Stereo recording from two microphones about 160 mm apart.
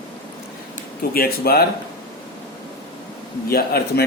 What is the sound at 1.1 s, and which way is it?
Speech, 70° left (ahead or behind).